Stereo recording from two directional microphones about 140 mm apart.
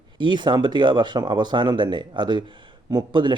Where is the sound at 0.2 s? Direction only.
35° right (ahead or behind).